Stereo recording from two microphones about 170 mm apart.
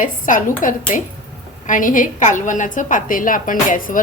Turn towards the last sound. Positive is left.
turn(degrees=50)  # may be behind; listen again after turning